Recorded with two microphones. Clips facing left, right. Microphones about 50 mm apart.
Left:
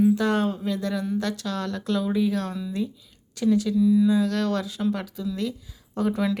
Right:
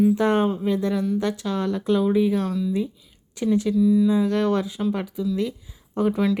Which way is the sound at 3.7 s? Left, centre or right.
Centre.